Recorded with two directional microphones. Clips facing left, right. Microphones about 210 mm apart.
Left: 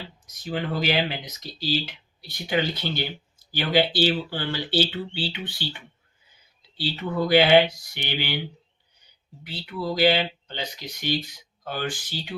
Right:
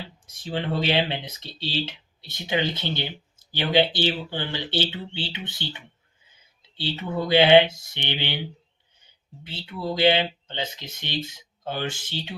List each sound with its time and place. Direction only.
0.3 s speech: 30° right (ahead or behind)
9.4 s speech: 25° right (ahead or behind)